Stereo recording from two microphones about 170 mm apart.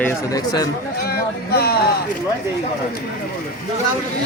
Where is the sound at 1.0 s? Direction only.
65° left (ahead or behind).